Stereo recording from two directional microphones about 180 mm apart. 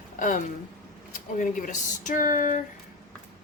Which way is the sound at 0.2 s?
45° left (ahead or behind).